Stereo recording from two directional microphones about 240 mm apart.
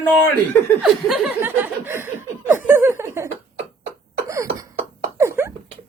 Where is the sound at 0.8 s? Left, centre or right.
Centre.